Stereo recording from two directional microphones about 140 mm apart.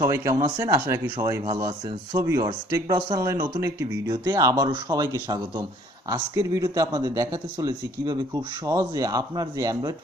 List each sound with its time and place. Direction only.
0.0 s speech: 20° right (ahead or behind)